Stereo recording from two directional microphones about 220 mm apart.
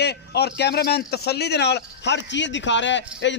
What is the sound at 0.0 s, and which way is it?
A man's voice, 50° left (ahead or behind).